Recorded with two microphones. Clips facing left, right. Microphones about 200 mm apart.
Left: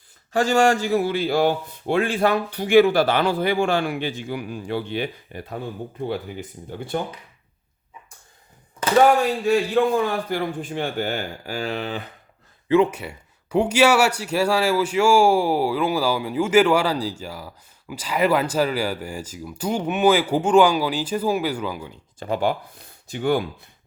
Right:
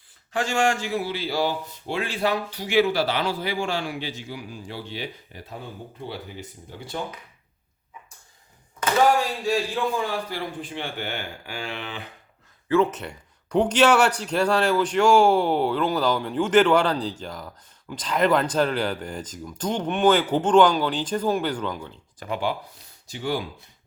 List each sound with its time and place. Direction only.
0.3 s a man's voice: 40° left (ahead or behind); by 5.5 s 60° left (ahead or behind)
6.7 s speech: 55° left (ahead or behind)
9.5 s a man's voice: 55° left (ahead or behind); by 12.0 s 40° left (ahead or behind)
12.6 s speech: 15° left (ahead or behind)
22.4 s speech: 50° left (ahead or behind)